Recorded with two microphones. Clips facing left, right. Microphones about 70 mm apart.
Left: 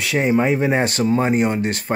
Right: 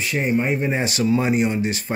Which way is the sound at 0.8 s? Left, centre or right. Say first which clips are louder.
Left 2 dB; left.